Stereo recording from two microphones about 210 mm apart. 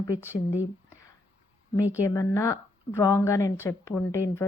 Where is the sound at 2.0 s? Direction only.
15° left (ahead or behind).